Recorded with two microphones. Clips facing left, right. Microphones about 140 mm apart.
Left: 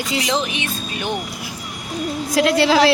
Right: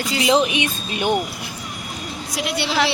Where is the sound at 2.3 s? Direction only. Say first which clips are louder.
Left 9 dB; 90° left.